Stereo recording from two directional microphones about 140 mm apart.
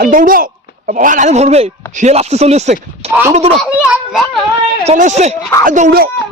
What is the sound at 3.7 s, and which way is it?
Children playing, 5° right (ahead or behind).